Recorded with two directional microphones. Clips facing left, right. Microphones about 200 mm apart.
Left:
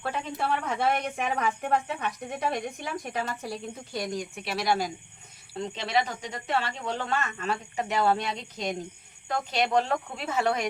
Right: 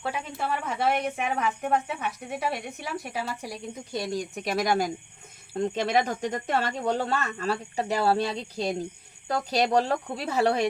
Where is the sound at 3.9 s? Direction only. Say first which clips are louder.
Right 2 dB; 30° right (ahead or behind).